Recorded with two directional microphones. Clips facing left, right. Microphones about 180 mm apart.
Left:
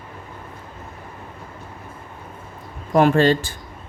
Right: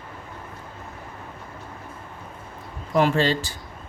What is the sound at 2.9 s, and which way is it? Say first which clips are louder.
Speech: left 5 dB; 50° left (ahead or behind).